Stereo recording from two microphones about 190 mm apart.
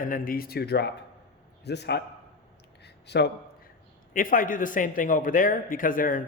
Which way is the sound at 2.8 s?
60° left (ahead or behind).